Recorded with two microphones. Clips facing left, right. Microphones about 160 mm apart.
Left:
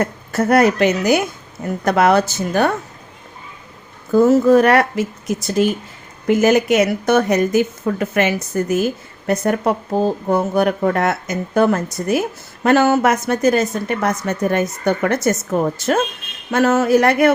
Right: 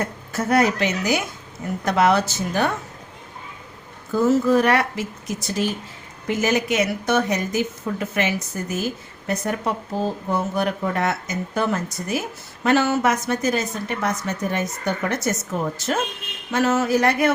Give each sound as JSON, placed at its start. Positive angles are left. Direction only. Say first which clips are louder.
{"t": 0.0, "sound": "a woman's voice", "louder": "left 7 dB", "side_deg": 60}
{"t": 4.1, "sound": "a woman's voice", "louder": "left 6 dB", "side_deg": 55}